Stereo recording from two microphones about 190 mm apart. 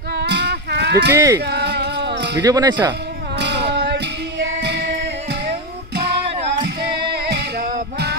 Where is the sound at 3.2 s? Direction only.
65° right (ahead or behind).